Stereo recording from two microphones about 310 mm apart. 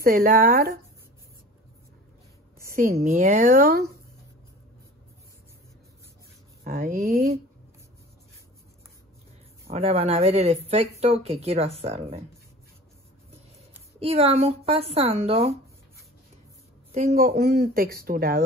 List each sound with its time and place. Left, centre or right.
0.0 s speech: right
2.7 s speech: right
6.6 s speech: right
9.7 s speech: centre
13.9 s speech: centre
16.9 s speech: right